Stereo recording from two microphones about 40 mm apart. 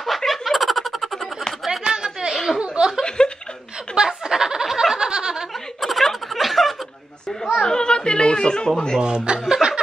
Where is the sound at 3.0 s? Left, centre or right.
Left.